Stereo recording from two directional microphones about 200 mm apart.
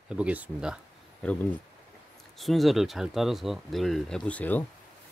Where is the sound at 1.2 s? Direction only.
5° left (ahead or behind).